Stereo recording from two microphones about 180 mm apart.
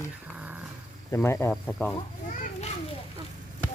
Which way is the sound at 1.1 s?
15° left (ahead or behind).